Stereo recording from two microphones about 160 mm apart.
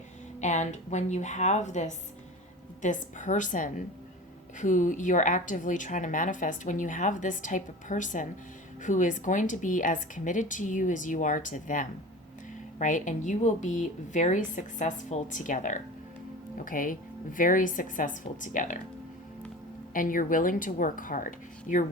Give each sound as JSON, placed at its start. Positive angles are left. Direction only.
{"t": 0.3, "sound": "a woman's voice", "side_deg": 45}
{"t": 19.9, "sound": "a woman's voice", "side_deg": 55}